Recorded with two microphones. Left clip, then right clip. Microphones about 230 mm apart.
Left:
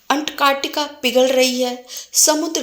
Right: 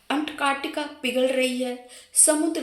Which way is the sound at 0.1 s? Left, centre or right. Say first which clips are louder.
Left 8 dB; left.